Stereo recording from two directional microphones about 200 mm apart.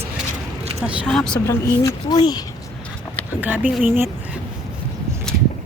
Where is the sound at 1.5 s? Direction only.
20° left (ahead or behind).